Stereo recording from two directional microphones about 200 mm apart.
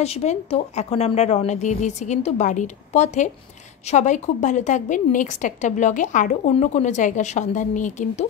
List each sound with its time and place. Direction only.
0.0 s a woman's voice: 30° left (ahead or behind)